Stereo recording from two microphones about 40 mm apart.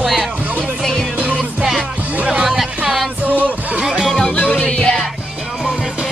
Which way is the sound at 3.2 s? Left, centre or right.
Right.